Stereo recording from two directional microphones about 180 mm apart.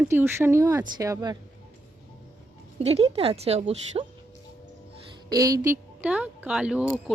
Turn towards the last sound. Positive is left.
turn(degrees=-5)  # may be behind; listen again after turning